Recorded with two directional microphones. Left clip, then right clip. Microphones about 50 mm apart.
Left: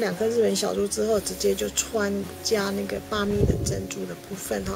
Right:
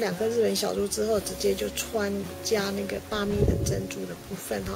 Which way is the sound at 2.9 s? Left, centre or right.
Centre.